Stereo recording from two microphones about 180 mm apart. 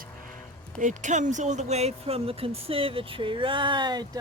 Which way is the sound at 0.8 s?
45° right (ahead or behind).